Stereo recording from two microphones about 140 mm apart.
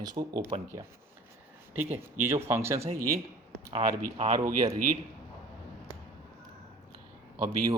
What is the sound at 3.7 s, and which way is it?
Speech, 50° right (ahead or behind).